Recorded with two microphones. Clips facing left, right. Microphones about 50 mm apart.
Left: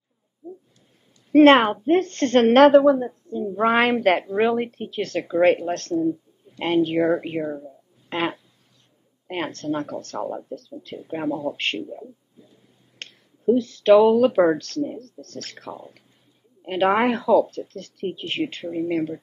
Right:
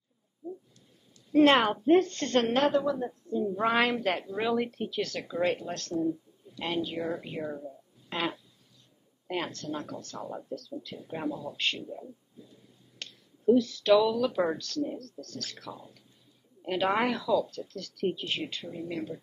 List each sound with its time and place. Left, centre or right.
1.3 s a woman's voice: left
3.0 s a woman's voice: left
3.8 s speech: left
7.2 s speech: left
8.1 s a sound: left
9.3 s speech: left
10.3 s a woman's voice: left
11.2 s speech: left
13.0 s a sound: left
13.5 s speech: left
14.9 s speech: left